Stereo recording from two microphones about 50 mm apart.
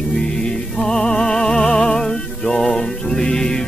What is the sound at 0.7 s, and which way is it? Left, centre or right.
Music, centre.